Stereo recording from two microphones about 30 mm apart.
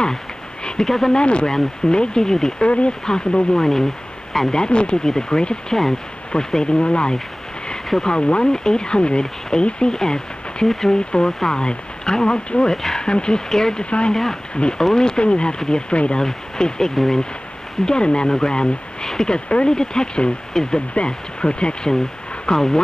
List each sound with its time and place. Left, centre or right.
0.8 s speech: centre
1.1 s speech: left
2.6 s speech: left
3.1 s speech: left
4.6 s speech: left
8.5 s speech: left
9.9 s speech: left
12.7 s speech: centre
13.0 s speech: left
13.8 s speech: left
16.2 s speech: left
17.8 s speech: left
20.9 s speech: left
22.5 s speech: centre